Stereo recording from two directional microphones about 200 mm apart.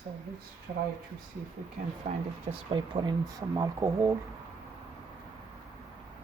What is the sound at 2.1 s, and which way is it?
Speech, 40° right (ahead or behind).